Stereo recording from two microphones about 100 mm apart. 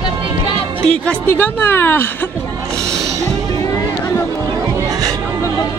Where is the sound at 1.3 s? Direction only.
20° left (ahead or behind).